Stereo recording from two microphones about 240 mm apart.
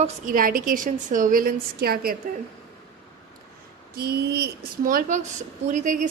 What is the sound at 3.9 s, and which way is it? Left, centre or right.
A woman's voice, right.